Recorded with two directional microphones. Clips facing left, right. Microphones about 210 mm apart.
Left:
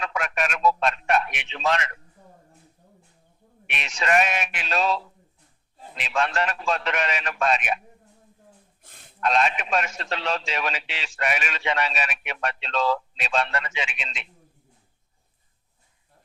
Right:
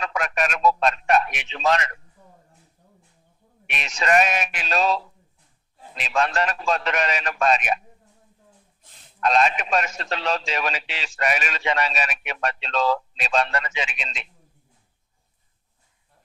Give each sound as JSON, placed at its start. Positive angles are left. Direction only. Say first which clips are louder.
{"t": 0.0, "sound": "a man's voice", "louder": "right 2 dB", "side_deg": -40}
{"t": 3.7, "sound": "a man's voice", "louder": "right 2 dB", "side_deg": -40}
{"t": 9.2, "sound": "a man's voice", "louder": "right 2 dB", "side_deg": -40}